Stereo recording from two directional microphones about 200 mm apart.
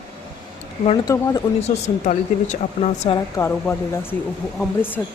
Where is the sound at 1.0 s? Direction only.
20° left (ahead or behind).